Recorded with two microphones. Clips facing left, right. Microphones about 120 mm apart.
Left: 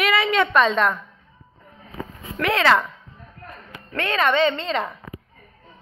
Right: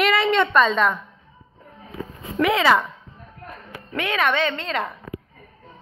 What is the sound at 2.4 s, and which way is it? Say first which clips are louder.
Speech: right 1 dB; 10° right (ahead or behind).